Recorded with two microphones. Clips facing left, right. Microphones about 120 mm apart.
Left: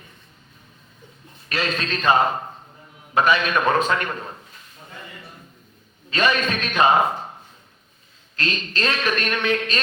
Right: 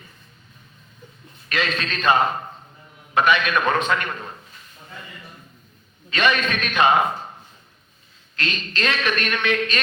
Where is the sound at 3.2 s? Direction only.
35° left (ahead or behind).